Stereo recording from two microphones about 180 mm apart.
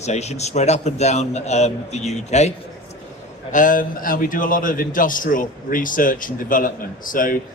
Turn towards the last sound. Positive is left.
turn(degrees=50)  # may be behind; listen again after turning